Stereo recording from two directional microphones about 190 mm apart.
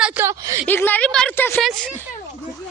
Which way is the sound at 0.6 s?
10° left (ahead or behind).